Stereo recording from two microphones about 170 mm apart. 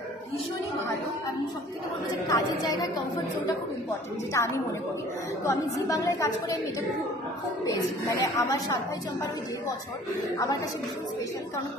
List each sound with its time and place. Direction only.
2.2 s a woman's voice: 20° left (ahead or behind)
4.3 s a woman's voice: 15° left (ahead or behind)
7.6 s a woman's voice: 20° left (ahead or behind)
10.3 s a woman's voice: 20° left (ahead or behind)